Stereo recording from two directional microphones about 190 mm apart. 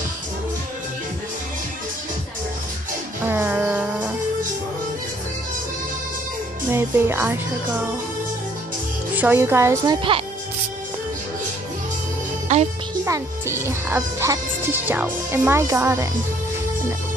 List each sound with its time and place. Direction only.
3.3 s music: 10° right (ahead or behind)
6.7 s speech: 15° right (ahead or behind)
9.1 s speech: 10° right (ahead or behind)
12.5 s music: 40° right (ahead or behind)
13.0 s speech: 15° right (ahead or behind)